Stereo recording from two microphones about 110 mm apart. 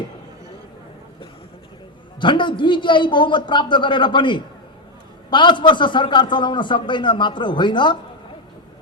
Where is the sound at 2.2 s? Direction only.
45° left (ahead or behind).